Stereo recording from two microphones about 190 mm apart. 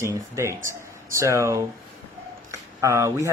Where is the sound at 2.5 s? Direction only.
15° right (ahead or behind).